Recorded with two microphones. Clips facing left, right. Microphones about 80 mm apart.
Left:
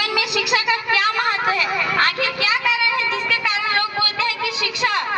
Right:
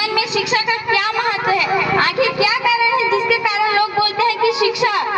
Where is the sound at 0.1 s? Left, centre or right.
Centre.